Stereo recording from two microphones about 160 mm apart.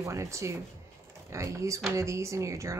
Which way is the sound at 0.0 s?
20° right (ahead or behind).